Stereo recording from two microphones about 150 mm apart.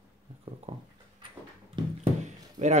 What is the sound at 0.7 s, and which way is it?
Speech, 40° right (ahead or behind).